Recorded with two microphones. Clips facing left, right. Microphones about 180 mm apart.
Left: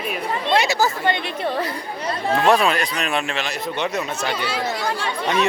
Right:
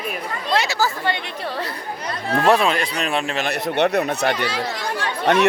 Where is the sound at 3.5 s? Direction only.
70° right (ahead or behind).